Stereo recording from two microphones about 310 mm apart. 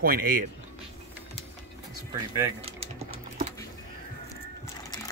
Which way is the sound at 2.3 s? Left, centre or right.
Centre.